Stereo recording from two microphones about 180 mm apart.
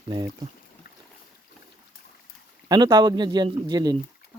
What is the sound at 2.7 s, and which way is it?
Speech, 25° right (ahead or behind).